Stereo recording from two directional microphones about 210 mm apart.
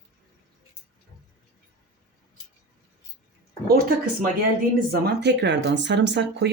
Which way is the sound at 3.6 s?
45° right (ahead or behind).